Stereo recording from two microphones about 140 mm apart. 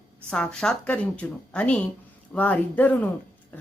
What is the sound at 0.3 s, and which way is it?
Speech, 5° left (ahead or behind).